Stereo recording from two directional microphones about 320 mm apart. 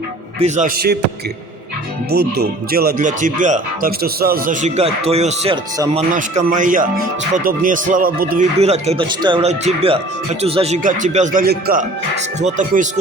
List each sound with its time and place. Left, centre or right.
0.3 s speech: right
2.0 s speech: right